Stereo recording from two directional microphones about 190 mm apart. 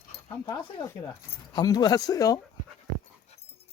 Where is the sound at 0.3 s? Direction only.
20° left (ahead or behind).